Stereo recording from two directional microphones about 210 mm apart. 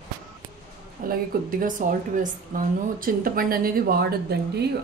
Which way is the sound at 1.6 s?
40° right (ahead or behind).